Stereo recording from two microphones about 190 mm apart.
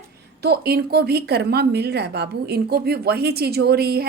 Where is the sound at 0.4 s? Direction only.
55° right (ahead or behind).